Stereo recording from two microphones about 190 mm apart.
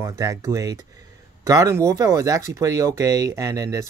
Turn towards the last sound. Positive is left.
turn(degrees=-20)  # may be behind; listen again after turning